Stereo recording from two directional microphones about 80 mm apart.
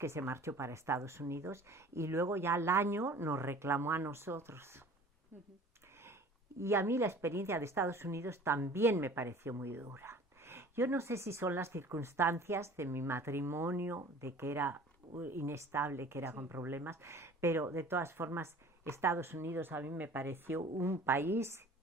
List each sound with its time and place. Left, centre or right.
0.0 s a woman's voice: right
6.6 s a woman's voice: right